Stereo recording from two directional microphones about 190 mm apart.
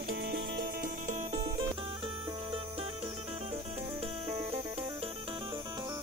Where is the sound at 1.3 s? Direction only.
25° right (ahead or behind).